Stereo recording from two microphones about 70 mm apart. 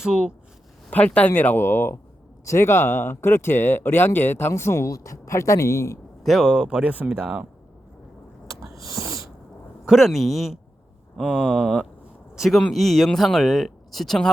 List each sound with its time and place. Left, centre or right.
0.0 s speech: centre
0.9 s speech: centre; by 6.0 s left
6.2 s speech: centre
8.6 s a sound: right
9.8 s speech: centre